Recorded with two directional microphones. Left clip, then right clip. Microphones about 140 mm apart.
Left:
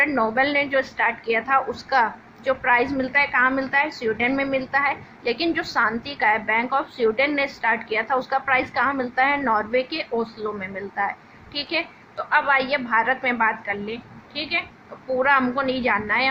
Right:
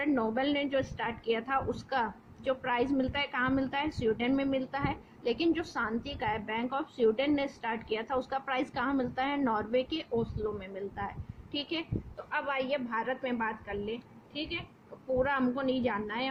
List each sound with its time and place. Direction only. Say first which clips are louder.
0.0 s a woman's voice: left 11 dB; 35° right (ahead or behind)